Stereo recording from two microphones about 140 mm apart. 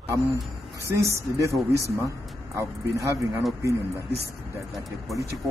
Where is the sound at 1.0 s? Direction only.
20° right (ahead or behind).